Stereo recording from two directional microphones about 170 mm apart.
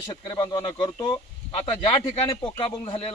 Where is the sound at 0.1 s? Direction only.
25° left (ahead or behind).